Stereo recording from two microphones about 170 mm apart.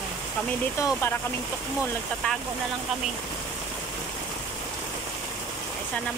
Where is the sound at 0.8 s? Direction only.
15° left (ahead or behind).